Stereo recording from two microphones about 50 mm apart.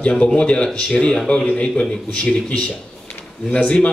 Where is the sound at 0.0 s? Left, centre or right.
Left.